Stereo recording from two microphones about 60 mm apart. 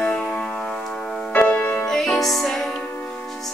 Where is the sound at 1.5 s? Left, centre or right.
Left.